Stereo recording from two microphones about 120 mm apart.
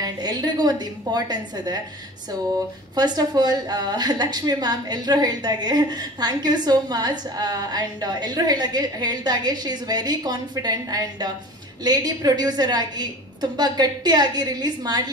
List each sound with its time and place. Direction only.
0.0 s a woman's voice: 35° right (ahead or behind)
3.0 s a woman's voice: 35° right (ahead or behind)